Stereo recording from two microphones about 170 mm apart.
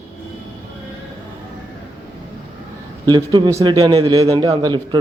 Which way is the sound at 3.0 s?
25° right (ahead or behind).